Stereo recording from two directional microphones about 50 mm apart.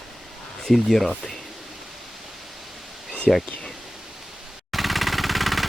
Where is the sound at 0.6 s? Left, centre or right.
Centre.